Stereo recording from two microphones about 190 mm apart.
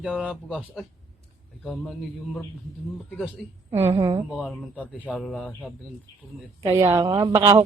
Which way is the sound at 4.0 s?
25° right (ahead or behind).